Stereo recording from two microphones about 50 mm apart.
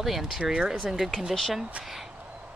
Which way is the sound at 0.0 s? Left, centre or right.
Centre.